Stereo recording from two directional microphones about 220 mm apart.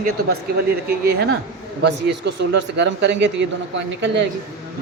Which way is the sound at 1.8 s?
50° right (ahead or behind).